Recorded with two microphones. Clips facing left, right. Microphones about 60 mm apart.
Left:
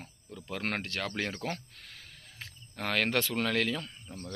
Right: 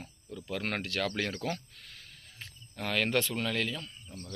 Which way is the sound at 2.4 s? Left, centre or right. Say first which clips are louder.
Left 1 dB; left.